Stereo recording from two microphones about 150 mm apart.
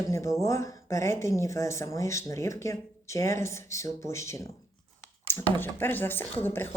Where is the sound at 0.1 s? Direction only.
20° left (ahead or behind).